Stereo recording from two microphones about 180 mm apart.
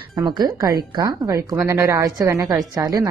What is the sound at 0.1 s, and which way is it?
A woman's voice, 25° right (ahead or behind).